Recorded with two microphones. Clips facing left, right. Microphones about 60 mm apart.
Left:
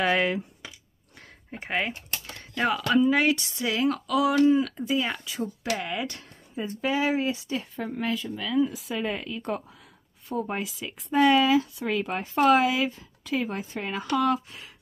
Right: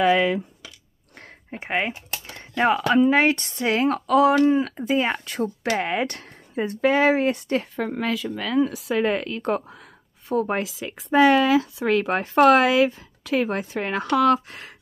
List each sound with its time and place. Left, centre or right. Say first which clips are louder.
1.5 s speech: right 3 dB; right
2.2 s typing: right 6 dB; right
3.0 s speech: right 2 dB; right
5.2 s speech: right 6 dB; right
7.8 s speech: right 4 dB; right